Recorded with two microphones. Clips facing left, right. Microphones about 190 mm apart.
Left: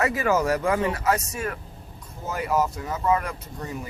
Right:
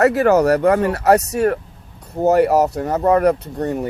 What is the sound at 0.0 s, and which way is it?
Speech, 65° right (ahead or behind).